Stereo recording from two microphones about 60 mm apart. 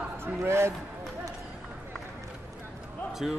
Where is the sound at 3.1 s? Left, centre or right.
Centre.